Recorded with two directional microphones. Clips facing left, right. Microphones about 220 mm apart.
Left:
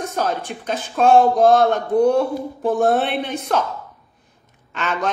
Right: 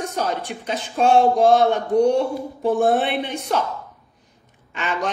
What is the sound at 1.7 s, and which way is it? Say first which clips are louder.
Speech: left 1 dB; 15° right (ahead or behind).